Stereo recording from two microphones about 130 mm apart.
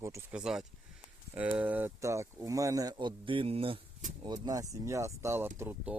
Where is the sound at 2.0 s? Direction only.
20° right (ahead or behind); by 3.8 s 45° right (ahead or behind).